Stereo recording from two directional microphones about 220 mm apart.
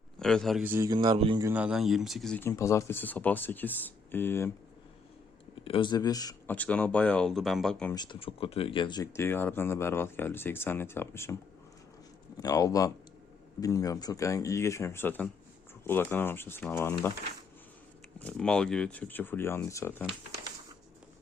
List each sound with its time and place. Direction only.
0.2 s a man's voice: centre (ahead or behind); by 1.5 s 25° right (ahead or behind)
1.5 s speech: 5° right (ahead or behind); by 4.5 s 10° left (ahead or behind)
5.6 s speech: 25° left (ahead or behind)
6.6 s speech: 5° left (ahead or behind)
7.9 s speech: 20° left (ahead or behind)
12.4 s speech: 15° left (ahead or behind)
18.2 s speech: 5° left (ahead or behind)